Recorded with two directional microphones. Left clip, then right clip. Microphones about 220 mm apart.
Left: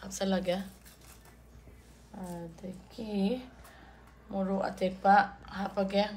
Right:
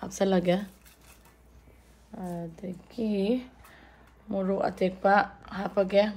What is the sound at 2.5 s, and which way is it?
A woman's voice, 35° right (ahead or behind).